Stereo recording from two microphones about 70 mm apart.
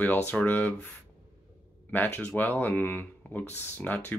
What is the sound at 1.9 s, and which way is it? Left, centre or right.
Speech, left.